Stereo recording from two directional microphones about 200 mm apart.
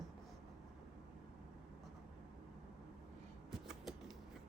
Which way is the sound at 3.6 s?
Centre (ahead or behind).